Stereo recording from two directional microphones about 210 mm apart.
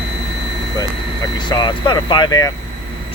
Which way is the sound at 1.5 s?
20° left (ahead or behind).